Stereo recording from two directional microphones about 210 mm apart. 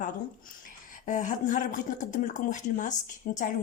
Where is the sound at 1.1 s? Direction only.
35° left (ahead or behind).